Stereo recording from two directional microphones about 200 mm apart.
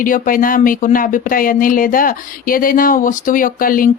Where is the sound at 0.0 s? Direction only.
45° left (ahead or behind).